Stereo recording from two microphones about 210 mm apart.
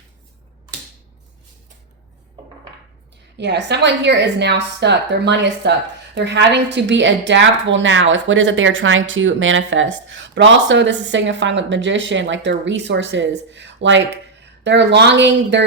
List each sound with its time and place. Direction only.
3.3 s a woman's voice: 55° right (ahead or behind)